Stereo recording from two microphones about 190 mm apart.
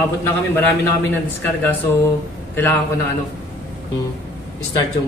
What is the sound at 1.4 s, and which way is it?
Speech, 10° left (ahead or behind).